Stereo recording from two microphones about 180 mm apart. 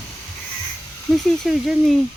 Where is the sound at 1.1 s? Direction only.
Centre (ahead or behind).